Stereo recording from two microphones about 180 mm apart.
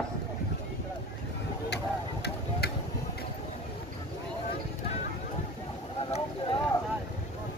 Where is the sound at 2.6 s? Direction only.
65° left (ahead or behind).